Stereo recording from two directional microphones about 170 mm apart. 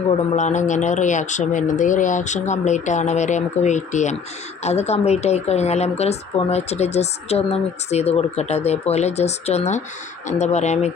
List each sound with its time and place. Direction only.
0.1 s a woman's voice: 45° left (ahead or behind)